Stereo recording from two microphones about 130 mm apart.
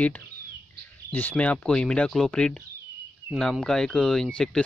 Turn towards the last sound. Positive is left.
turn(degrees=5)  # may be behind; listen again after turning